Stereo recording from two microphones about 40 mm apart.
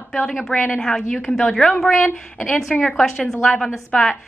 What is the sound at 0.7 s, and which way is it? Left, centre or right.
Speech, centre.